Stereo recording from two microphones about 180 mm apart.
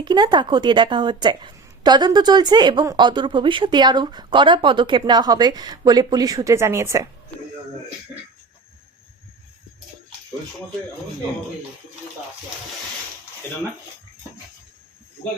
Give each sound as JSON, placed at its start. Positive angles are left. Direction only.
{"t": 0.0, "sound": "a woman's voice", "side_deg": -25}